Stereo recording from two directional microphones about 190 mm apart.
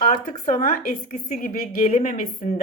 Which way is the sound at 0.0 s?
45° left (ahead or behind).